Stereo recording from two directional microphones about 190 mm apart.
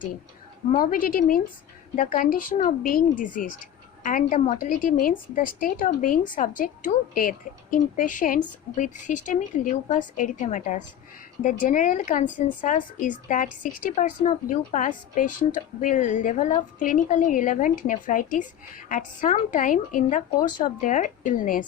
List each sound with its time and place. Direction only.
0.8 s a woman's voice: 45° left (ahead or behind)